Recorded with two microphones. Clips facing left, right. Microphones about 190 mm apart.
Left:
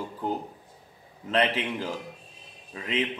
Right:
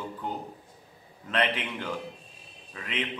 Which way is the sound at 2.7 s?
25° left (ahead or behind).